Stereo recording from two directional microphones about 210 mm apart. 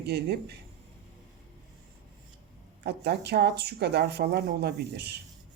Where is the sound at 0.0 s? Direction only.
50° right (ahead or behind).